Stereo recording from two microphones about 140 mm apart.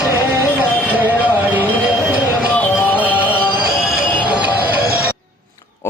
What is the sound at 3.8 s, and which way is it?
Music, centre (ahead or behind).